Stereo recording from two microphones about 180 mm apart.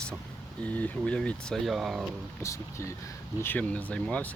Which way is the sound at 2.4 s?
15° left (ahead or behind).